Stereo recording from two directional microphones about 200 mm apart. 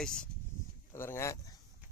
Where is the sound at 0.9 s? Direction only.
15° left (ahead or behind).